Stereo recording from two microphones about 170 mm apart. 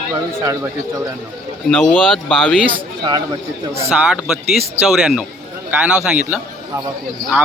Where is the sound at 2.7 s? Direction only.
25° right (ahead or behind).